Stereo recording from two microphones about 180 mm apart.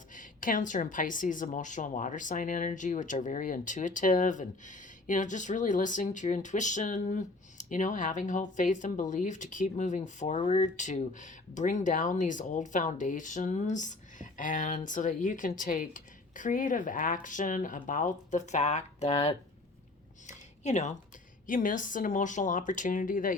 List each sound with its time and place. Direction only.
0.1 s a woman's voice: 50° left (ahead or behind)
20.2 s a sound: 40° left (ahead or behind)
21.4 s a woman's voice: 50° left (ahead or behind)